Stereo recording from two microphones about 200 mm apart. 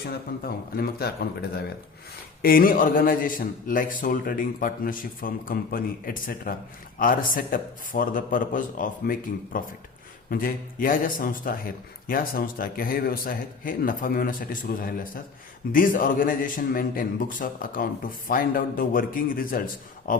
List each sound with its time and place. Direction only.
0.0 s speech: 50° left (ahead or behind)